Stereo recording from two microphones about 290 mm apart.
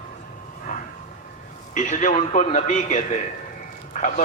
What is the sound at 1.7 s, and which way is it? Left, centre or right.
A man's voice, left.